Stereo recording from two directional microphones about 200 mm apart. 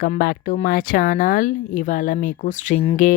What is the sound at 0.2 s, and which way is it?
Speech, 45° left (ahead or behind).